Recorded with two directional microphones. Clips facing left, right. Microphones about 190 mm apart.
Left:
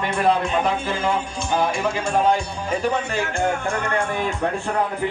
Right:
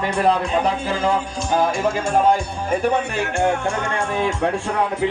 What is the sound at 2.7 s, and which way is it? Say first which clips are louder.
A man's voice: right 3 dB; 60° right (ahead or behind).